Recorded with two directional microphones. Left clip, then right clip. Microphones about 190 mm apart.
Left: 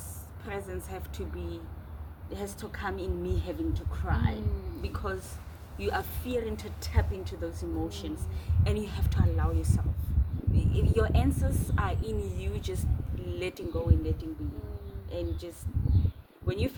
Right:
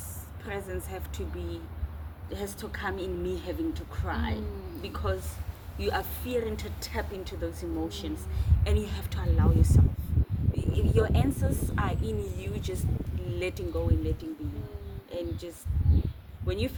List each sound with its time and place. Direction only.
0.4 s a woman's voice: 15° left (ahead or behind)